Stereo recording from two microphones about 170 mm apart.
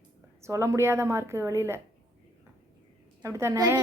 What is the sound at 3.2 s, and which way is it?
Speech, 20° right (ahead or behind).